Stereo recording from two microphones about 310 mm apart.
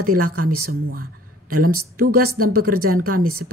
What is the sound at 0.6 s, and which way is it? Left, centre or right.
Speech, right.